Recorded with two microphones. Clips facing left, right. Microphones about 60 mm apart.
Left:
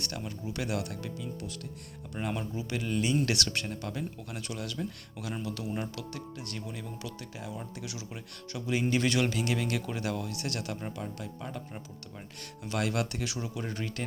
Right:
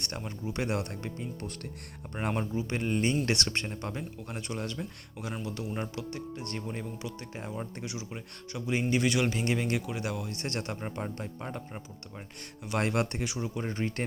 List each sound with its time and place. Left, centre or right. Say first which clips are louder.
0.0 s speech: right 1 dB; right
2.4 s speech: right 3 dB; right
9.4 s speech: right 1 dB; right
10.3 s speech: right 1 dB; right
12.8 s speech: right 2 dB; right